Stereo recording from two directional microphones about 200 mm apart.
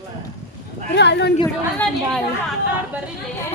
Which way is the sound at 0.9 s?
60° left (ahead or behind).